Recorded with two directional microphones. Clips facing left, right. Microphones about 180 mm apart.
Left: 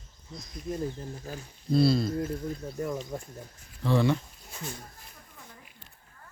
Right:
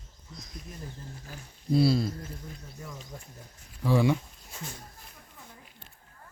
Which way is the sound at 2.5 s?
40° left (ahead or behind).